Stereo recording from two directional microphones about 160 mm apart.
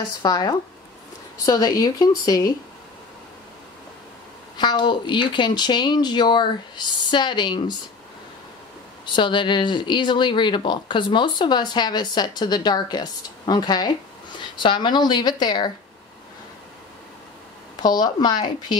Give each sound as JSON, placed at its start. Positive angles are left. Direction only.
{"t": 0.2, "sound": "speech", "side_deg": 25}
{"t": 4.6, "sound": "speech", "side_deg": 30}
{"t": 9.0, "sound": "speech", "side_deg": 30}
{"t": 17.8, "sound": "speech", "side_deg": 25}